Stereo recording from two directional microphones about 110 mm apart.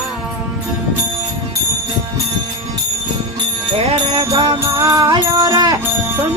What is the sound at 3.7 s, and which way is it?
Jingle bell, 55° right (ahead or behind).